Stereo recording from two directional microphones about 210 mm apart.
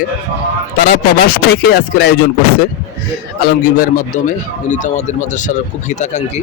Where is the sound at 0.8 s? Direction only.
45° left (ahead or behind).